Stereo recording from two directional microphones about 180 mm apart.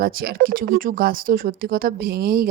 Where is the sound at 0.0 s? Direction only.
55° right (ahead or behind).